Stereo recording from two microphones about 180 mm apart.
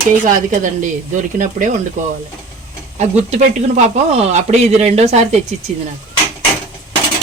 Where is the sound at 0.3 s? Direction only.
45° right (ahead or behind).